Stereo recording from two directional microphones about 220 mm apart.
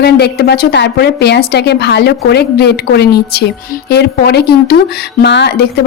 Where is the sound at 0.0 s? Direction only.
45° left (ahead or behind).